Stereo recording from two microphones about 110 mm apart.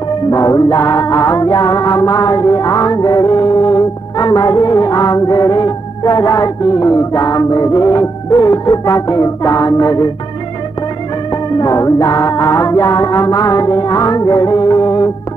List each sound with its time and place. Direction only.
0.3 s music: 35° left (ahead or behind)
11.5 s music: 35° left (ahead or behind)